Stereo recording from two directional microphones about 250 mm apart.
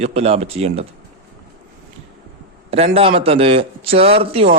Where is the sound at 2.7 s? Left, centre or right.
Right.